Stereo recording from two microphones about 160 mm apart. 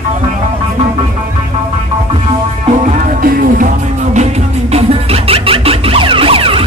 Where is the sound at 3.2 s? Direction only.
65° right (ahead or behind); by 6.6 s 35° right (ahead or behind).